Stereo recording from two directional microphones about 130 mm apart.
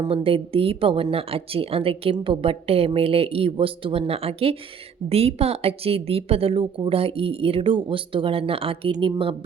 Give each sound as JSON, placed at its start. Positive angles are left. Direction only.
{"t": 0.1, "sound": "a woman's voice", "side_deg": -45}